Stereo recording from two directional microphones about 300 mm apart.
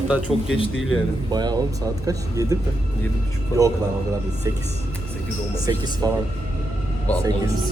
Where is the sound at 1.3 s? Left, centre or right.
Centre.